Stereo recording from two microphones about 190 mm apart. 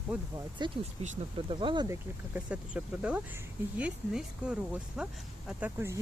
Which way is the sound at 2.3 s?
10° right (ahead or behind).